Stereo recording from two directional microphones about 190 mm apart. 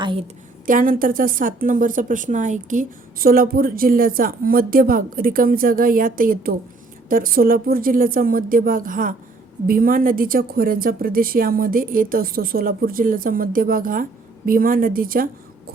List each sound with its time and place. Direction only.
0.0 s a woman's voice: 25° right (ahead or behind)
0.6 s a woman's voice: 45° right (ahead or behind)